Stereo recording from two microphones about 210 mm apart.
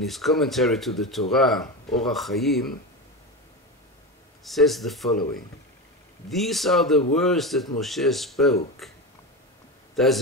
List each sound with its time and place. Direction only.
0.0 s speech: centre (ahead or behind)
4.5 s speech: centre (ahead or behind)
5.1 s speech: 40° left (ahead or behind)
6.3 s speech: centre (ahead or behind)
10.0 s a man's voice: centre (ahead or behind)